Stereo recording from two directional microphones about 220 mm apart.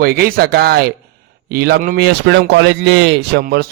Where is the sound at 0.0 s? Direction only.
45° right (ahead or behind).